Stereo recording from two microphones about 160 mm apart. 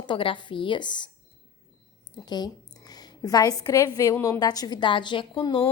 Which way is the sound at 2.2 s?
25° left (ahead or behind).